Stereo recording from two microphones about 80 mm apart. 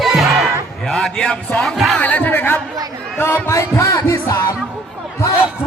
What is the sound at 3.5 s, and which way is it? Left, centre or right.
Heart murmur, left.